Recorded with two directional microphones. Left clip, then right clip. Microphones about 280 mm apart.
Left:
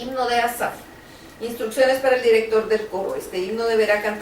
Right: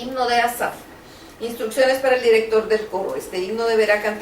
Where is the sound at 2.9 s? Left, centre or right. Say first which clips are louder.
Right 1 dB; right.